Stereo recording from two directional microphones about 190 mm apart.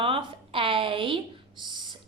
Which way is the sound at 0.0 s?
30° right (ahead or behind).